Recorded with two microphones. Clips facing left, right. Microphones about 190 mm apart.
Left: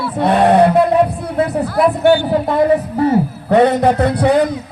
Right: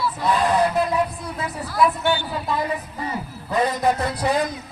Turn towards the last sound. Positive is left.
turn(degrees=65)  # may be behind; listen again after turning